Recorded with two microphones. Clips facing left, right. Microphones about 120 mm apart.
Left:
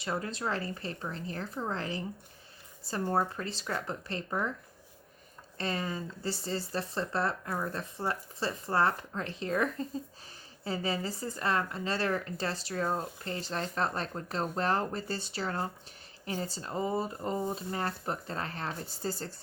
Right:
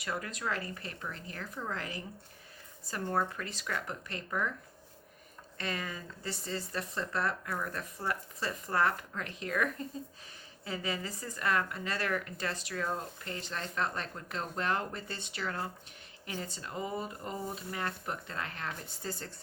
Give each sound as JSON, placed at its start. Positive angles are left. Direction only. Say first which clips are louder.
{"t": 0.0, "sound": "speech", "louder": "left 3 dB", "side_deg": 30}
{"t": 3.1, "sound": "a woman's voice", "louder": "left 2 dB", "side_deg": 30}
{"t": 5.5, "sound": "a woman's voice", "louder": "left 4 dB", "side_deg": 30}